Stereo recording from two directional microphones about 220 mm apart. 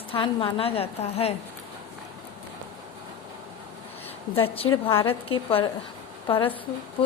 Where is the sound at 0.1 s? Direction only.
25° left (ahead or behind).